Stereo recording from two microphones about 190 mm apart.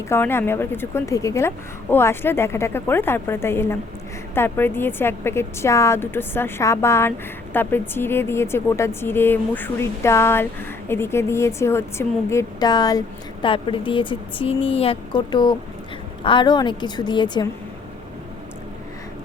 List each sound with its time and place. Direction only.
0.1 s a woman's voice: 10° left (ahead or behind)